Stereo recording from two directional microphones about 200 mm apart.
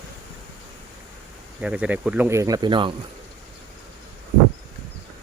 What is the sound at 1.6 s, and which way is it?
Speech, 5° right (ahead or behind).